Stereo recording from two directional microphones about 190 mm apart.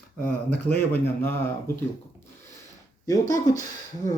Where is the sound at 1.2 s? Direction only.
10° left (ahead or behind).